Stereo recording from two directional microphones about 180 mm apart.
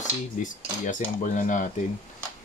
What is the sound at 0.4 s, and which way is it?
Cutlery, 45° left (ahead or behind).